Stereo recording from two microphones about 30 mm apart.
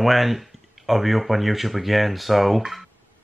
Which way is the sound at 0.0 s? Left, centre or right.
Centre.